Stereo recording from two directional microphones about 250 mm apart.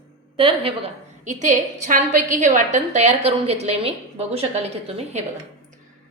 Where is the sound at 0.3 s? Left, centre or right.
Right.